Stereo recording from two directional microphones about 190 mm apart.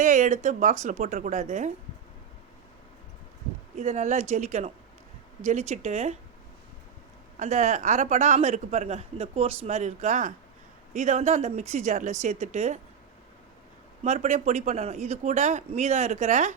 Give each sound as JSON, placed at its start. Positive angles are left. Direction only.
{"t": 0.0, "sound": "a man's voice", "side_deg": -40}
{"t": 3.8, "sound": "a man's voice", "side_deg": -40}
{"t": 7.3, "sound": "a man's voice", "side_deg": -40}
{"t": 14.0, "sound": "a man's voice", "side_deg": -35}